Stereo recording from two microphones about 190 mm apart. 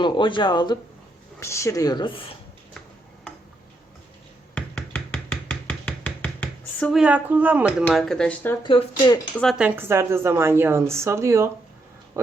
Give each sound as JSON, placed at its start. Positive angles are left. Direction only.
{"t": 0.0, "sound": "a woman's voice", "side_deg": 25}
{"t": 4.5, "sound": "a sound", "side_deg": 10}
{"t": 6.9, "sound": "a woman's voice", "side_deg": -5}
{"t": 7.9, "sound": "speech", "side_deg": 5}
{"t": 8.6, "sound": "a woman's voice", "side_deg": 25}
{"t": 9.4, "sound": "a woman's voice", "side_deg": 0}